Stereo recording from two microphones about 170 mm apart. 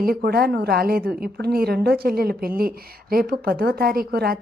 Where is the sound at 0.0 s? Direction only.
65° right (ahead or behind).